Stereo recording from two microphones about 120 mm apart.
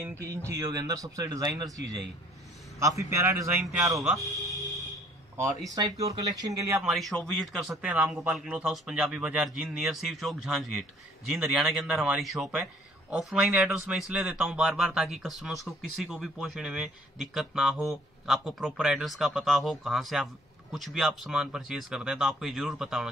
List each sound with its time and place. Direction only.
0.0 s speech: 25° right (ahead or behind)
2.8 s speech: 25° right (ahead or behind)
4.0 s speech: centre (ahead or behind)
5.8 s speech: 30° right (ahead or behind)
6.8 s speech: centre (ahead or behind)